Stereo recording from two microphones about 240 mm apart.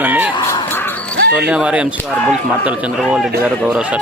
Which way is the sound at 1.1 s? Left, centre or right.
Right.